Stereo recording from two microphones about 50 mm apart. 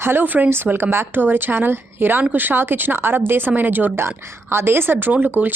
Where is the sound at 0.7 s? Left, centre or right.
Right.